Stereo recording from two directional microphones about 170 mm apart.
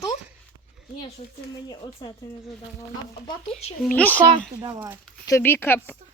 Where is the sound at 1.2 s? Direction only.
45° left (ahead or behind).